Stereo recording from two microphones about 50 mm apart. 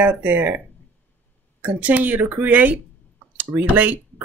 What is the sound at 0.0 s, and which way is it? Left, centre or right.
Speech, right.